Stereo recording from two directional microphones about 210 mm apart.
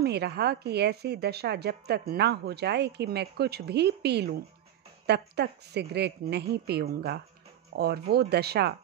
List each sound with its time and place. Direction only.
0.0 s a woman's voice: 50° right (ahead or behind)